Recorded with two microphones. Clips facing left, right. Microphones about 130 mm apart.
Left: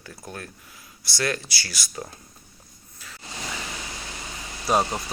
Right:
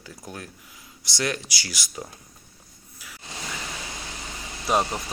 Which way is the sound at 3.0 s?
10° right (ahead or behind).